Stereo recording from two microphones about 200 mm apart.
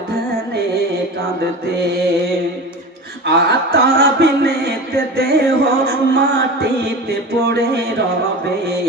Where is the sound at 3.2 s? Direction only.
55° right (ahead or behind).